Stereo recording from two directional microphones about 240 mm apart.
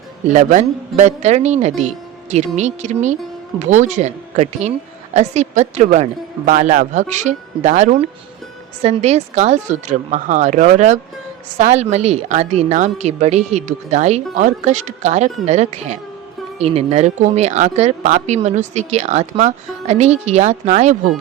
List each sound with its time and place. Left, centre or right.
0.3 s speech: right